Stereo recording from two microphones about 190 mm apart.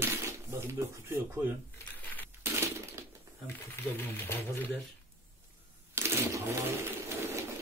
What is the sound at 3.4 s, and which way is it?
Speech, 10° left (ahead or behind).